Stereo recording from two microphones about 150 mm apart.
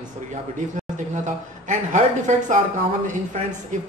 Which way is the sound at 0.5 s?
55° right (ahead or behind).